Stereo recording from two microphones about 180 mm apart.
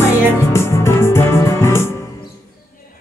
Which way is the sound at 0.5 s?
15° left (ahead or behind).